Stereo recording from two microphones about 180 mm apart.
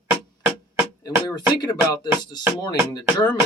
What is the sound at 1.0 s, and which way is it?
Speech, 20° left (ahead or behind).